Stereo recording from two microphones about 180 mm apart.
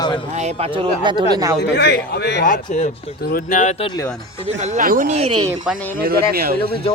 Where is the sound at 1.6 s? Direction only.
65° left (ahead or behind).